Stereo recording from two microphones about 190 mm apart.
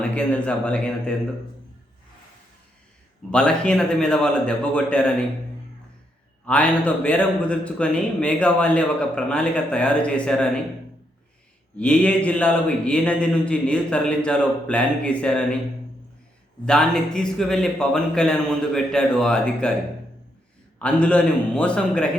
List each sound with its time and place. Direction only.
0.0 s a man's voice: 5° left (ahead or behind)
3.2 s a man's voice: 5° left (ahead or behind)
6.4 s a man's voice: 5° left (ahead or behind)
11.8 s a man's voice: 5° left (ahead or behind)
16.6 s a man's voice: 5° left (ahead or behind)
20.7 s a man's voice: 5° left (ahead or behind)